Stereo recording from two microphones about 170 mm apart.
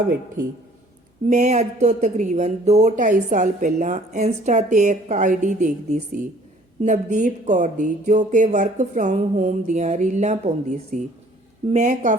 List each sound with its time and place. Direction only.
1.3 s speech: 40° right (ahead or behind)